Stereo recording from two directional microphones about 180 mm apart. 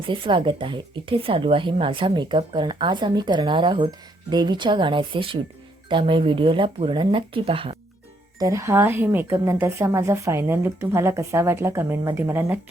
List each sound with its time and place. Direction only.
0.1 s speech: 30° right (ahead or behind)
8.4 s a woman's voice: 15° right (ahead or behind)